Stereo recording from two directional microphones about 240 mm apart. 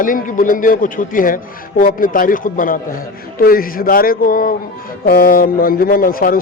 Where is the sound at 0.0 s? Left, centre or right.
Left.